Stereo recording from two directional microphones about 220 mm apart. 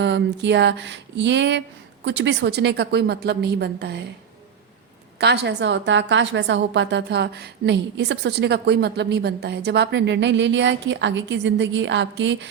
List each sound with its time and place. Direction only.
0.0 s a woman's voice: 55° right (ahead or behind)
5.2 s a woman's voice: 50° right (ahead or behind)